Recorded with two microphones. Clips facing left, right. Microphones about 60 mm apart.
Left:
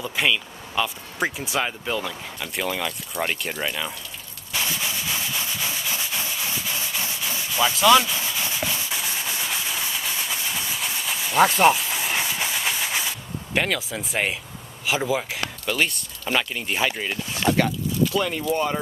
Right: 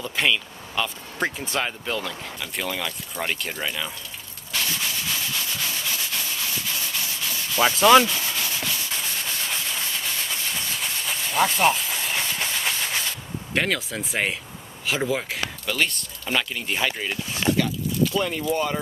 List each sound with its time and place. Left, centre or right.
0.0 s speech: centre
4.5 s a sound: centre
6.0 s rub: centre
7.1 s sanding: centre
7.6 s speech: right
8.0 s rub: centre
8.9 s train: centre
13.6 s speech: centre